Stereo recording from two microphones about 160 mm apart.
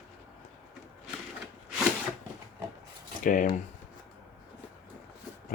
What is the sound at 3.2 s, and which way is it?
Speech, 55° left (ahead or behind).